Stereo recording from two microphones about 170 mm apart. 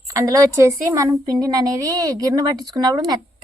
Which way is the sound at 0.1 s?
20° right (ahead or behind).